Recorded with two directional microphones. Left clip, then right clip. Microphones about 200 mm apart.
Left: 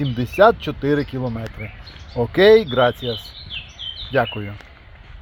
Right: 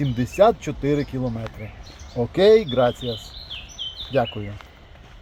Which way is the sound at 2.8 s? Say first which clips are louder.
Left 3 dB; 30° left (ahead or behind).